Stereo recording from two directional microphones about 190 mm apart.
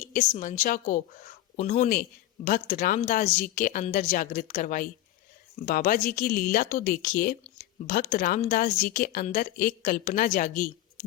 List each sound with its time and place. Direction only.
0.1 s speech: 40° left (ahead or behind)